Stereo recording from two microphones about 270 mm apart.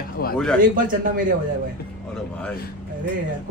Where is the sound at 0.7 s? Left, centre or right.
Right.